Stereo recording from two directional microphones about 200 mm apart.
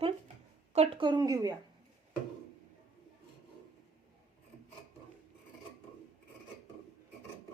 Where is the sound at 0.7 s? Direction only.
30° right (ahead or behind).